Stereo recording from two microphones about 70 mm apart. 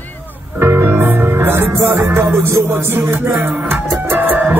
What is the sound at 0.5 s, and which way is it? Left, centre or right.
Music, right.